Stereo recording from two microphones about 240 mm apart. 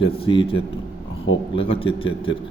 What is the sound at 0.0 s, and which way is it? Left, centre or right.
Speech, left.